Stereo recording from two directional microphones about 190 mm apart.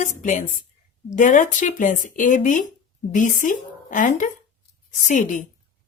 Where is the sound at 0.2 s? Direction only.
45° left (ahead or behind).